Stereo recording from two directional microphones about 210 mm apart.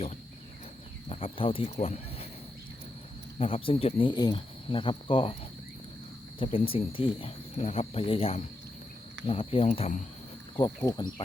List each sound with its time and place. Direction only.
1.1 s speech: 25° left (ahead or behind)
3.3 s speech: 25° left (ahead or behind)
6.4 s speech: 25° left (ahead or behind)
10.6 s speech: 15° left (ahead or behind)